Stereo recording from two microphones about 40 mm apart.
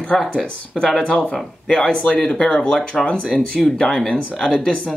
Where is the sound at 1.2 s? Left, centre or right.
Centre.